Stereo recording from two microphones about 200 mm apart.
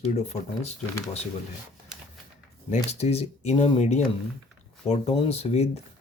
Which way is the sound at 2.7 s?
35° left (ahead or behind).